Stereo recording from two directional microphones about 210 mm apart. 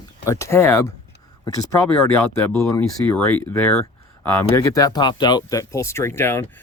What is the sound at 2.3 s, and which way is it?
Speech, 15° left (ahead or behind).